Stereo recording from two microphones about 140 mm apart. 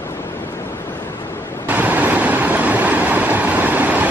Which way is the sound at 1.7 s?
10° right (ahead or behind).